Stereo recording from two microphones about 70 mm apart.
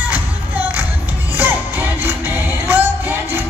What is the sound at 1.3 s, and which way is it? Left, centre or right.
Music, right.